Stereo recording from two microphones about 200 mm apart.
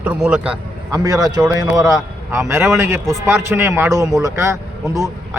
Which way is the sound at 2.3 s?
10° right (ahead or behind).